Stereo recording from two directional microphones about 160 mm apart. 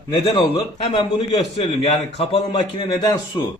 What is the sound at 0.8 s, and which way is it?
A man's voice, 35° left (ahead or behind).